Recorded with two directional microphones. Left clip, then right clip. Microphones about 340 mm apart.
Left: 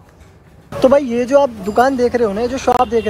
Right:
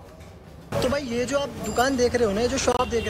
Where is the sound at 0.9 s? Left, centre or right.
Centre.